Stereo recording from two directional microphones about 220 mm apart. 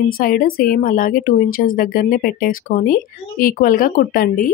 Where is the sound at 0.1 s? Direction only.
40° left (ahead or behind).